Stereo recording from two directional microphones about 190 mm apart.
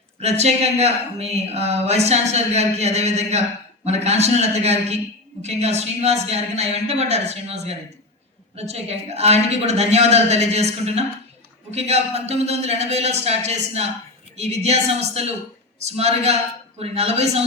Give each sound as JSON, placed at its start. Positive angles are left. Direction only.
{"t": 0.2, "sound": "speech", "side_deg": -35}